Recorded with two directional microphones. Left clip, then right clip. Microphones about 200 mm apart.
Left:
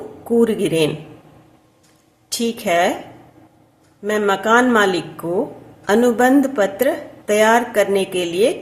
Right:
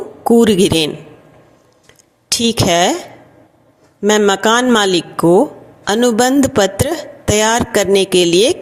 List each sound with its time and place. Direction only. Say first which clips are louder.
0.3 s speech: right 6 dB; 45° right (ahead or behind)
2.4 s speech: right 4 dB; 45° right (ahead or behind)
4.0 s speech: right 6 dB; 45° right (ahead or behind)